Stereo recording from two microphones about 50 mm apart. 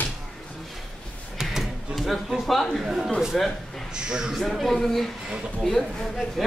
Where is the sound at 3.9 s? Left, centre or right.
Centre.